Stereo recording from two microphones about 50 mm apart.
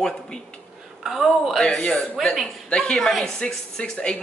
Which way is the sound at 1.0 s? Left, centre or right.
Centre.